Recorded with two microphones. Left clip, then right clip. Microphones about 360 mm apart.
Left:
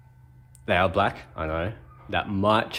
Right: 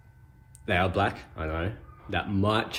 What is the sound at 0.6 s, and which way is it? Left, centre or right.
Speech, centre.